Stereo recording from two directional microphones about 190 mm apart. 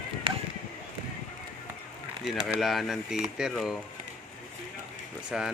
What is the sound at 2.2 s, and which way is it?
Speech, centre (ahead or behind).